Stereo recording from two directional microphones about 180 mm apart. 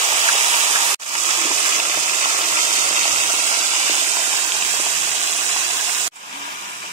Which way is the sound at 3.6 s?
40° right (ahead or behind).